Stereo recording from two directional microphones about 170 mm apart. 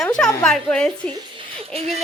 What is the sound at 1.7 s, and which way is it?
Speech, 40° right (ahead or behind).